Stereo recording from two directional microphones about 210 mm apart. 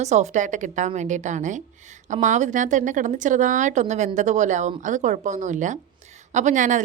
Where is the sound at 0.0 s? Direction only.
35° right (ahead or behind).